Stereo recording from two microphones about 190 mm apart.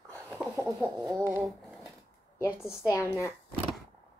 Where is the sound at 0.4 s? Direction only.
Centre (ahead or behind).